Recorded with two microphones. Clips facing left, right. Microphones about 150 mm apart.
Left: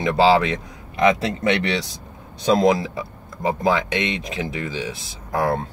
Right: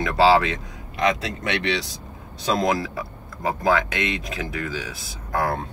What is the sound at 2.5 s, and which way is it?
Speech, 25° left (ahead or behind).